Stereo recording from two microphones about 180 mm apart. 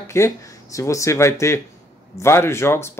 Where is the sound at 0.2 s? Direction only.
15° left (ahead or behind).